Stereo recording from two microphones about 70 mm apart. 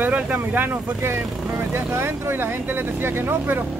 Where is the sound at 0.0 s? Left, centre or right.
Right.